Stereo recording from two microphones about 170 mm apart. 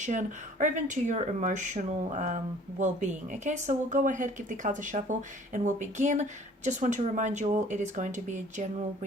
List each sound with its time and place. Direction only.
0.0 s speech: 45° right (ahead or behind)